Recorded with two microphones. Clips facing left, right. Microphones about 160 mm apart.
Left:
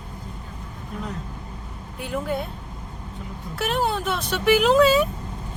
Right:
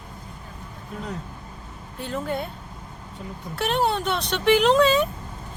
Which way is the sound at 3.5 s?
Centre (ahead or behind).